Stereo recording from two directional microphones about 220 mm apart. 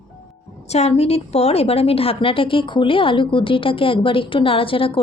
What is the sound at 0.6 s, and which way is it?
A woman's voice, 30° left (ahead or behind).